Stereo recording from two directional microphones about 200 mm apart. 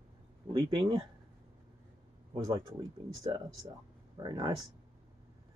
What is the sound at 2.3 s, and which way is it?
Speech, 25° right (ahead or behind).